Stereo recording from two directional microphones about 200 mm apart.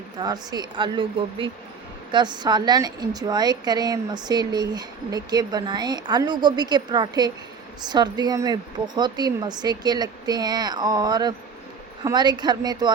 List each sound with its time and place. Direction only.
0.2 s a woman's voice: 20° right (ahead or behind)